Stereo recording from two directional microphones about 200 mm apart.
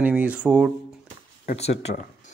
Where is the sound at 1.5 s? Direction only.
30° left (ahead or behind).